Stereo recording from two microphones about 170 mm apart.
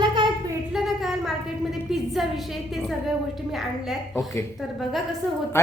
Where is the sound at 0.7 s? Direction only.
Centre (ahead or behind).